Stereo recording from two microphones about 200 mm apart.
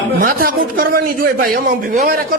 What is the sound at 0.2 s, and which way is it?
A man's voice, 45° right (ahead or behind).